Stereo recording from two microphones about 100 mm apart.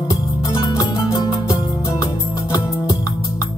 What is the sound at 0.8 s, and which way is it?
Music, 35° left (ahead or behind).